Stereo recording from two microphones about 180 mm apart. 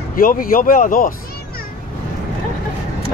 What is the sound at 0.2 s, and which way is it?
Speech, 50° left (ahead or behind).